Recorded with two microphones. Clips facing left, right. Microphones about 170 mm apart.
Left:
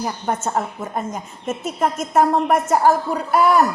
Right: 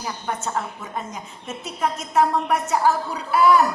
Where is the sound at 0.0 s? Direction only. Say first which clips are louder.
Left 5 dB; 50° left (ahead or behind).